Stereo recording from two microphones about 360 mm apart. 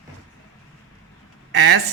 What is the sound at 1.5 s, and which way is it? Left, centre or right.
Speech, right.